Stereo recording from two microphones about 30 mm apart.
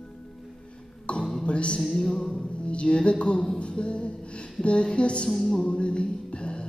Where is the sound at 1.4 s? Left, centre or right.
Left.